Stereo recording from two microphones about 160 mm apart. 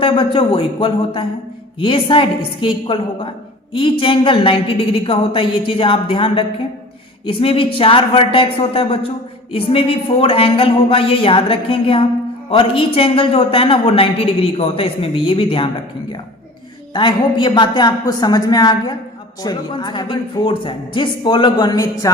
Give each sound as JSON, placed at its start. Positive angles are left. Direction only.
{"t": 0.0, "sound": "a woman's voice", "side_deg": 35}
{"t": 16.9, "sound": "speech", "side_deg": 30}